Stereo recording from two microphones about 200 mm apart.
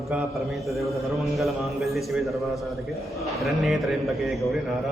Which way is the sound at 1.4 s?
Centre (ahead or behind).